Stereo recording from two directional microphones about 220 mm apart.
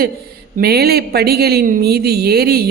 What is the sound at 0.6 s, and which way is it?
Speech, 45° right (ahead or behind).